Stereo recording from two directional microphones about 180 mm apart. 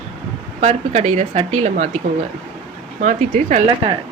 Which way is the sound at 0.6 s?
40° right (ahead or behind).